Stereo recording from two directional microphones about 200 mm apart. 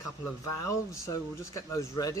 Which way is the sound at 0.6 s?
15° left (ahead or behind).